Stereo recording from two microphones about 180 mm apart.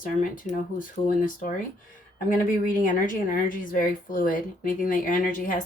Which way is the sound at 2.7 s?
45° left (ahead or behind).